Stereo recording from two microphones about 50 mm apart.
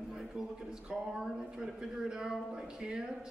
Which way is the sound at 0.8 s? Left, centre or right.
Centre.